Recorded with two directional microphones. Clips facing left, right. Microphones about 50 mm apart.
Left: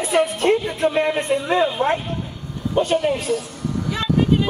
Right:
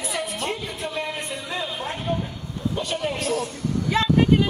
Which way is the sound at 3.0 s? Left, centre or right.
Centre.